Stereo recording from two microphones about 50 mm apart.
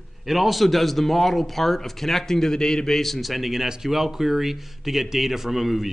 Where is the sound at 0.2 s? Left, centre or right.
Centre.